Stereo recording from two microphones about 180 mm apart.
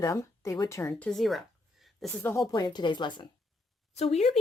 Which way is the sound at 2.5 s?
25° left (ahead or behind).